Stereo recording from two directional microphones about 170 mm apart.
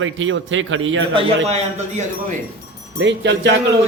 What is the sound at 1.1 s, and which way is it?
Speech, 35° right (ahead or behind).